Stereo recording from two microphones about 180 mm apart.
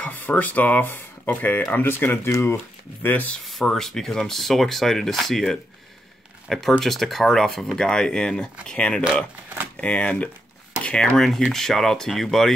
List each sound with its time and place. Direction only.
0.0 s speech: 10° left (ahead or behind)
10.8 s a sound: 5° left (ahead or behind)
11.1 s speech: centre (ahead or behind)